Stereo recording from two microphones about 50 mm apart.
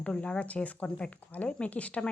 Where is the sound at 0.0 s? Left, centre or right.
Left.